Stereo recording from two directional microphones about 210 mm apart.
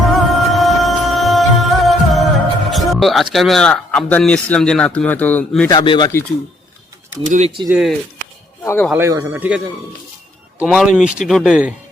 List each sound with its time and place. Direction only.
0.1 s music: centre (ahead or behind)
5.7 s speech: 20° left (ahead or behind)
7.3 s speech: 35° right (ahead or behind)
7.7 s speech: centre (ahead or behind)
8.6 s speech: 10° left (ahead or behind)
8.9 s speech: 15° right (ahead or behind)
10.6 s speech: 5° right (ahead or behind)